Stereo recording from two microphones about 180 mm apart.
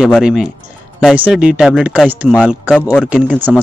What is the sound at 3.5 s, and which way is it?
Speech, 5° right (ahead or behind).